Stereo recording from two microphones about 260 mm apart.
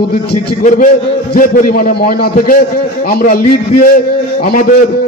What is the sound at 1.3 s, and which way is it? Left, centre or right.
A man's voice, left.